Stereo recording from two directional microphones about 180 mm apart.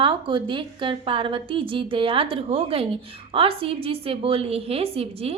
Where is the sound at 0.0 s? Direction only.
25° right (ahead or behind).